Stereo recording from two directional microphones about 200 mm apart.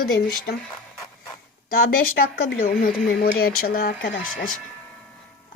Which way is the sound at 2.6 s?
50° left (ahead or behind).